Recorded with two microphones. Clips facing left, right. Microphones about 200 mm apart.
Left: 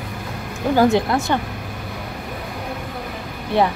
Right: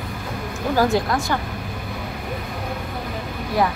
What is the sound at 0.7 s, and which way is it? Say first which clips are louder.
Speech: left 3 dB; 20° left (ahead or behind).